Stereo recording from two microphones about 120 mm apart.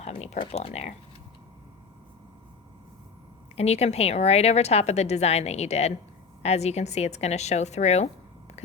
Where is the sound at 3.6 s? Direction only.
60° left (ahead or behind).